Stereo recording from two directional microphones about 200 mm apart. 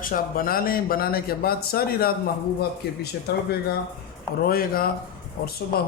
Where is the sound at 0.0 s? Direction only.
45° left (ahead or behind).